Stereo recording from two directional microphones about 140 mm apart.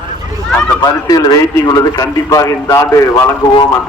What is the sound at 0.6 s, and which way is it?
A man's voice, 25° left (ahead or behind).